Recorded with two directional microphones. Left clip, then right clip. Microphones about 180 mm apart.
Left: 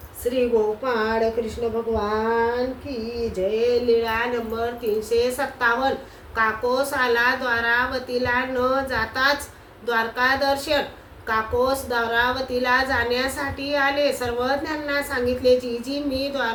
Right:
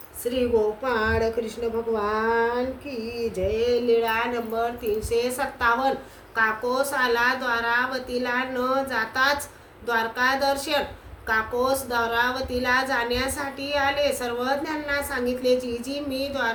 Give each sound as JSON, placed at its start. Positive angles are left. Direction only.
{"t": 0.9, "sound": "a woman's voice", "side_deg": -10}
{"t": 3.7, "sound": "a woman's voice", "side_deg": -15}